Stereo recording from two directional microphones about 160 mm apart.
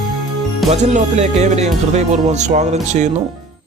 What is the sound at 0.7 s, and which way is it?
Speech, 45° right (ahead or behind).